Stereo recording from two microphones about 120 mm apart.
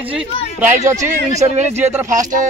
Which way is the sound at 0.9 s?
85° right.